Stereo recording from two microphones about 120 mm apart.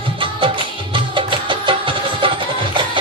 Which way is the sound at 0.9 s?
45° right (ahead or behind).